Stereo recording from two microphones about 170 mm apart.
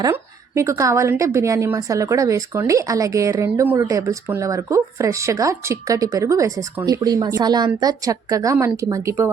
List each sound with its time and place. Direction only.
0.0 s a woman's voice: 15° right (ahead or behind)